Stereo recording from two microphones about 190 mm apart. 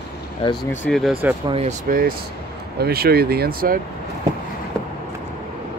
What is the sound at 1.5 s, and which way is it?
Speech, 35° right (ahead or behind).